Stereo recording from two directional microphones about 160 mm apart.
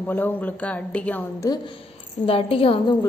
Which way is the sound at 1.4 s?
30° left (ahead or behind).